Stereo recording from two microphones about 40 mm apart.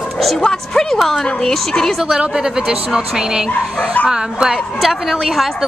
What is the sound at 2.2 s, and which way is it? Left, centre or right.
A woman's voice, centre.